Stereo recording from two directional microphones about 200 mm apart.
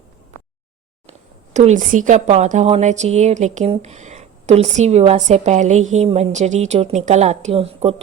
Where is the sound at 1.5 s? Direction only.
35° right (ahead or behind).